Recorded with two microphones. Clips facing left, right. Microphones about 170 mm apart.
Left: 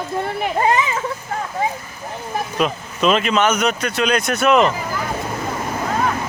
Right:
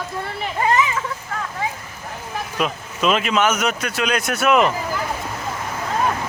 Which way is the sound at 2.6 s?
5° right (ahead or behind).